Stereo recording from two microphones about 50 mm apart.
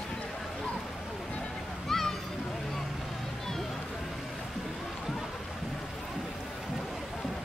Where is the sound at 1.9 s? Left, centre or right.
Centre.